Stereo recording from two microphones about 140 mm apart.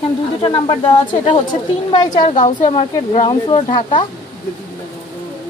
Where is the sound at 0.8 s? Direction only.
40° left (ahead or behind).